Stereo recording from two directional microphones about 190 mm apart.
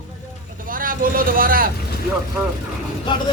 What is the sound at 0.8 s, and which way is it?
Vehicle, 45° right (ahead or behind).